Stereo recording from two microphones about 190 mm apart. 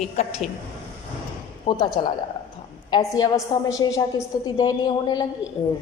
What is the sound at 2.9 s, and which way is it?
A woman's voice, 20° left (ahead or behind).